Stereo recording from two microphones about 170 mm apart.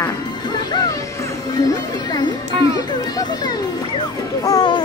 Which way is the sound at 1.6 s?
20° left (ahead or behind).